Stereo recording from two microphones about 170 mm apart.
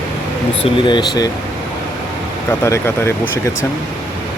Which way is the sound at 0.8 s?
25° left (ahead or behind).